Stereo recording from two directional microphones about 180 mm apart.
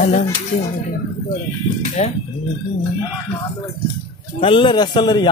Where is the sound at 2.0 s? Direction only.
40° left (ahead or behind).